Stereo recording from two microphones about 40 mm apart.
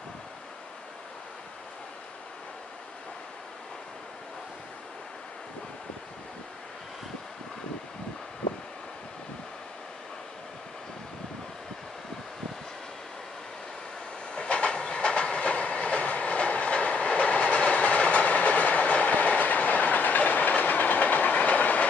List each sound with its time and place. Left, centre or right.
14.3 s train: left